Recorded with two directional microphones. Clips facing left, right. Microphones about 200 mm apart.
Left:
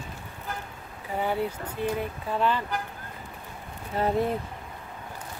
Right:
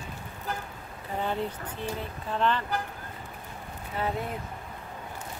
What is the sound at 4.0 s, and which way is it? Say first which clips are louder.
Speech: left 4 dB; 40° left (ahead or behind).